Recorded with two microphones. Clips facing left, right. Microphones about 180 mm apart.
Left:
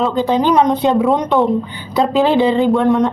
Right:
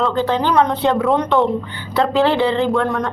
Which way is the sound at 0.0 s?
15° left (ahead or behind).